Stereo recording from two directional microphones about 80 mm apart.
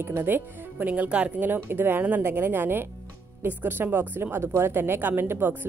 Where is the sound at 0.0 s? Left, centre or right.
Right.